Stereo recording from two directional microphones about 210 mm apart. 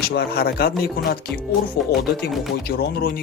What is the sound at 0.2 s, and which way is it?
Speech, 50° left (ahead or behind).